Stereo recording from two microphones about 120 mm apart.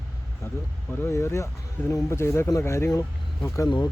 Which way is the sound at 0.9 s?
20° left (ahead or behind).